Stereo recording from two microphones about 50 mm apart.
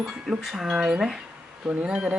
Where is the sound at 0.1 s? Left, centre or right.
Centre.